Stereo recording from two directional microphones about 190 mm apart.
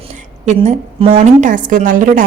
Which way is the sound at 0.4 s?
35° right (ahead or behind).